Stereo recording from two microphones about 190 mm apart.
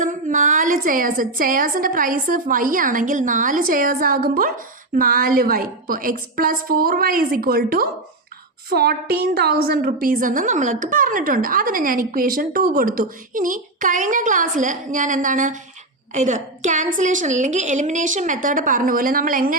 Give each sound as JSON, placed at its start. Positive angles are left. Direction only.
{"t": 0.0, "sound": "a woman's voice", "side_deg": -45}